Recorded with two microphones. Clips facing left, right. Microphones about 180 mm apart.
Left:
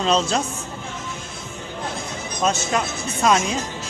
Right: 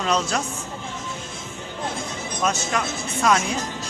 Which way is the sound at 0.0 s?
25° left (ahead or behind).